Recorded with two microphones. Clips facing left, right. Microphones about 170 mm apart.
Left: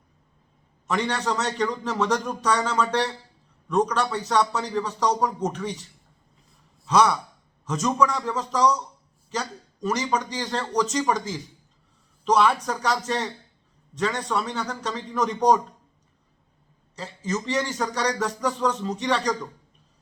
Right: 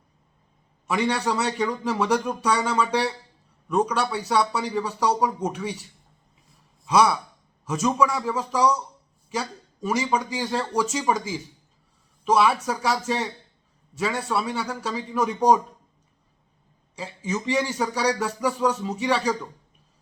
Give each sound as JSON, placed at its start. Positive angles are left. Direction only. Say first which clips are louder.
{"t": 0.9, "sound": "speech", "louder": "right 2 dB", "side_deg": -10}
{"t": 6.8, "sound": "speech", "louder": "even", "side_deg": -10}
{"t": 16.9, "sound": "speech", "louder": "even", "side_deg": -10}